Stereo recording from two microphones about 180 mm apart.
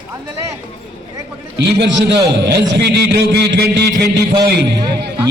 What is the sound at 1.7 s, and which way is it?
A man's voice, 65° right (ahead or behind).